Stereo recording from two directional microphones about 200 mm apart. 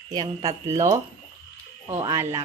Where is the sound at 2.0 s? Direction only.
15° right (ahead or behind).